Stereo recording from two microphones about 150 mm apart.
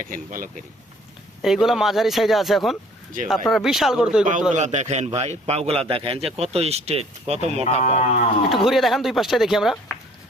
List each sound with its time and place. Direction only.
0.0 s speech: 65° right (ahead or behind)
1.4 s speech: centre (ahead or behind)
4.5 s a man's voice: 50° right (ahead or behind)
7.6 s speech: 45° left (ahead or behind)
8.6 s speech: centre (ahead or behind)